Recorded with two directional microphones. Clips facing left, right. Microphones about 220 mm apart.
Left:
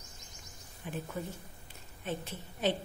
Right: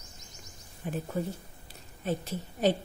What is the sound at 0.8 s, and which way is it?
A woman's voice, 40° right (ahead or behind).